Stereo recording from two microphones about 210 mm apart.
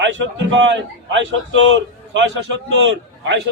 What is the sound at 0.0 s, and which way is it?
A man's voice, 60° right (ahead or behind).